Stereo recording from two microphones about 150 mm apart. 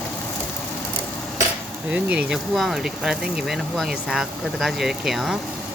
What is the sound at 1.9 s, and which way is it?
Speech, 10° right (ahead or behind).